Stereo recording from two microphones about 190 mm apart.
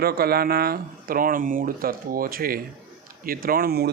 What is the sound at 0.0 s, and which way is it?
Speech, 55° right (ahead or behind).